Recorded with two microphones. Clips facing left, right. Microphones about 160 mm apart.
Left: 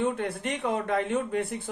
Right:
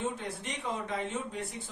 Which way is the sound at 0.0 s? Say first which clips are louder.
Left 8 dB; 60° left (ahead or behind).